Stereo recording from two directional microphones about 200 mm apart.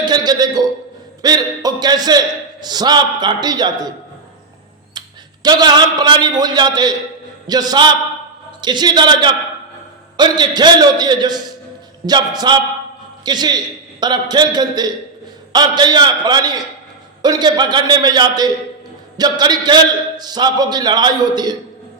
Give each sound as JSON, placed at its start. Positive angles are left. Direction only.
{"t": 0.0, "sound": "a sound", "side_deg": -20}
{"t": 1.2, "sound": "a man's voice", "side_deg": -20}
{"t": 4.9, "sound": "a man's voice", "side_deg": -20}